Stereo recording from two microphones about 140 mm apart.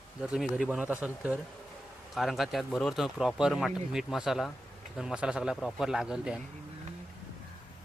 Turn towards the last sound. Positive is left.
turn(degrees=-5)  # may be behind; listen again after turning